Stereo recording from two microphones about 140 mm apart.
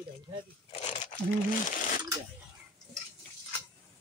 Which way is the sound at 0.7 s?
50° left (ahead or behind).